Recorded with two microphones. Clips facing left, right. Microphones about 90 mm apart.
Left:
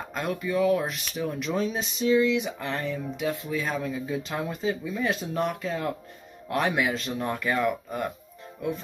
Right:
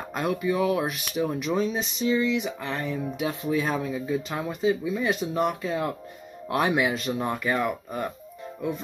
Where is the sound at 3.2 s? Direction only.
20° right (ahead or behind).